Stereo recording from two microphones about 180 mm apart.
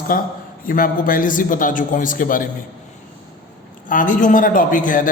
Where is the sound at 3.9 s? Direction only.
50° left (ahead or behind).